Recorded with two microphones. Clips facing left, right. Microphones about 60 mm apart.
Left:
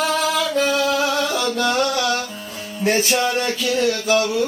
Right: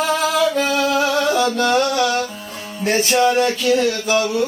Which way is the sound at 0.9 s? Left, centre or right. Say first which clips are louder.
Right 3 dB; centre.